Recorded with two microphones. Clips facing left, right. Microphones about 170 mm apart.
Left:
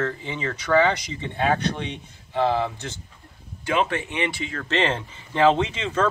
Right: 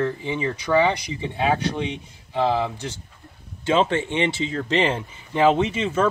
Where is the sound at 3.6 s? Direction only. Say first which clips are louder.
Right 4 dB; 25° right (ahead or behind).